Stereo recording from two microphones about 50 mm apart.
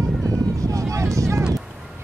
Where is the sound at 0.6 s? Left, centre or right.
Right.